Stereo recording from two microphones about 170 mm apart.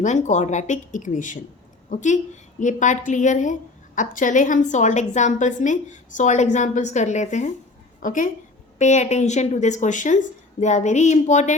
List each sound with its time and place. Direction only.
0.0 s a woman's voice: 45° left (ahead or behind)